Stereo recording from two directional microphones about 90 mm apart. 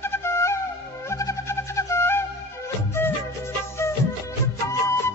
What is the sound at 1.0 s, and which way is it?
Music, 35° left (ahead or behind).